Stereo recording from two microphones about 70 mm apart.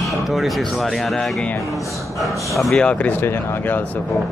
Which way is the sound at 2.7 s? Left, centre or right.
Centre.